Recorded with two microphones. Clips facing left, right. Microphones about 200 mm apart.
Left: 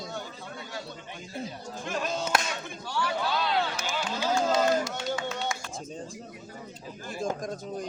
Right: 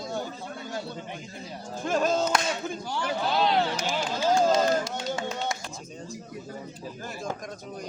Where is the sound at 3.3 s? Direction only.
40° right (ahead or behind).